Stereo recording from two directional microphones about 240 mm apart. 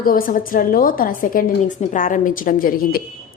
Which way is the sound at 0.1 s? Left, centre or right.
Left.